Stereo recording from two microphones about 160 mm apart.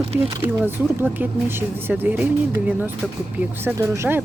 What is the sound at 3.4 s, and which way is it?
Speech, 15° right (ahead or behind).